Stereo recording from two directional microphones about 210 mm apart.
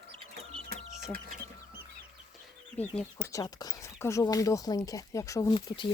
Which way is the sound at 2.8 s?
5° left (ahead or behind).